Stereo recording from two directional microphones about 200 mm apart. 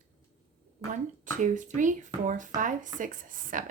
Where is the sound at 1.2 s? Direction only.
40° right (ahead or behind).